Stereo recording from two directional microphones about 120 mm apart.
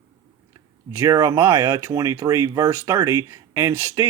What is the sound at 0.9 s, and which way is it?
Speech, 25° right (ahead or behind).